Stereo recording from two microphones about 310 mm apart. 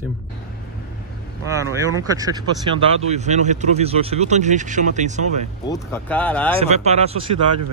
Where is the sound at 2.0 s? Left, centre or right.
Centre.